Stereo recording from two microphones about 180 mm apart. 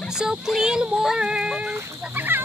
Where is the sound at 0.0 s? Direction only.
5° right (ahead or behind).